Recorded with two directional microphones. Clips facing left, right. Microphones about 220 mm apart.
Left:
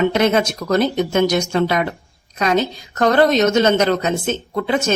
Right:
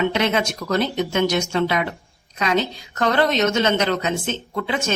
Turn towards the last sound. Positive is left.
turn(degrees=45)  # may be behind; listen again after turning